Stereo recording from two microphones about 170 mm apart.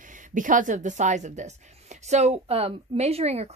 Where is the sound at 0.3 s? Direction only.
50° right (ahead or behind).